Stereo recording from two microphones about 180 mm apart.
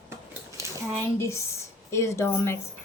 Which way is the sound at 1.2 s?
15° left (ahead or behind).